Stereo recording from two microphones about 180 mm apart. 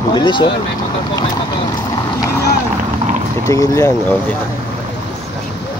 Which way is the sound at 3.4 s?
15° left (ahead or behind).